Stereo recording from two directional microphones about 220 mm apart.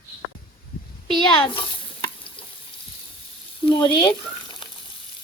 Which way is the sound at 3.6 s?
20° left (ahead or behind).